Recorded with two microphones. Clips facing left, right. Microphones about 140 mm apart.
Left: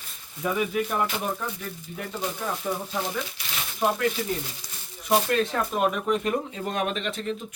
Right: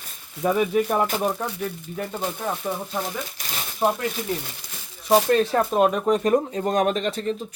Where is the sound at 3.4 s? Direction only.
40° right (ahead or behind).